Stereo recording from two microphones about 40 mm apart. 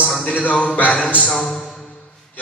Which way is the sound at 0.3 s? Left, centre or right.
Left.